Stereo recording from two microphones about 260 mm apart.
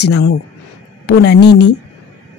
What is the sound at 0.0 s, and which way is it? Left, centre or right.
A woman's voice, left.